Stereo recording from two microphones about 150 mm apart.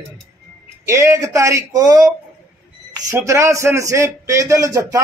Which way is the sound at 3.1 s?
20° right (ahead or behind).